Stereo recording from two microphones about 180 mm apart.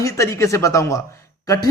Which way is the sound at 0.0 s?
15° left (ahead or behind).